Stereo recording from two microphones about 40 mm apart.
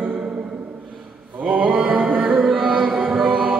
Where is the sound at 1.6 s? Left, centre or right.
Right.